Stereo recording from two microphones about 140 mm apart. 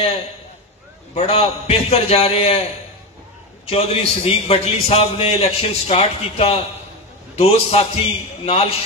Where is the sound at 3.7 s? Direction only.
45° left (ahead or behind).